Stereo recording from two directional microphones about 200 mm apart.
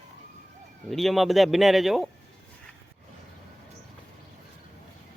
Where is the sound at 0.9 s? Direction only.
Centre (ahead or behind).